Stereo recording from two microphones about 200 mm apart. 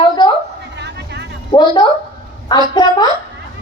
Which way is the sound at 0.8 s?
60° right (ahead or behind).